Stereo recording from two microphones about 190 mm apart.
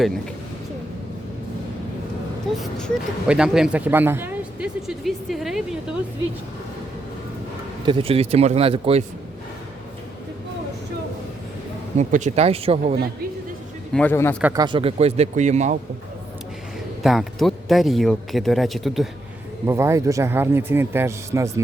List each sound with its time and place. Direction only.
2.6 s speech: centre (ahead or behind)
7.9 s a man's voice: 30° right (ahead or behind)
11.9 s a man's voice: 40° right (ahead or behind)
13.9 s speech: 10° left (ahead or behind)
14.5 s a man's voice: 25° right (ahead or behind); by 15.8 s 40° right (ahead or behind)
17.0 s speech: centre (ahead or behind)
19.6 s a man's voice: 15° right (ahead or behind)